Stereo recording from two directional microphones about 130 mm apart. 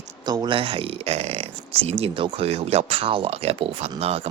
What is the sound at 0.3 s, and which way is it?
Speech, 40° right (ahead or behind).